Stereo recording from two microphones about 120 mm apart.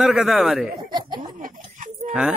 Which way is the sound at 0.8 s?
35° right (ahead or behind).